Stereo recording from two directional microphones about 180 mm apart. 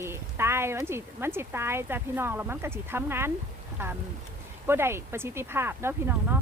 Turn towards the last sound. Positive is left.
turn(degrees=-10)  # may be behind; listen again after turning